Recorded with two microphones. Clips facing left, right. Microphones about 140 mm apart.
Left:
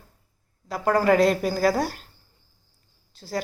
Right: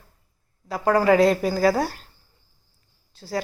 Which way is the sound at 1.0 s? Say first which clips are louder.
Right 2 dB; centre (ahead or behind).